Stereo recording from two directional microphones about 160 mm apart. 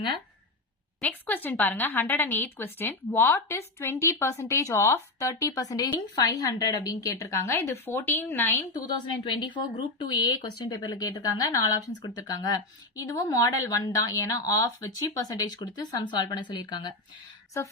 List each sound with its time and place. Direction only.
1.0 s speech: 10° left (ahead or behind)
9.2 s speech: 30° left (ahead or behind)